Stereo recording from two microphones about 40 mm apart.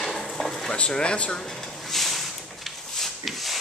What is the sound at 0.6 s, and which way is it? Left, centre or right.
Speech, left.